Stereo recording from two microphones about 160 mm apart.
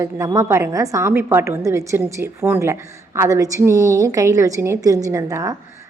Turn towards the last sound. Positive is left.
turn(degrees=-20)  # may be behind; listen again after turning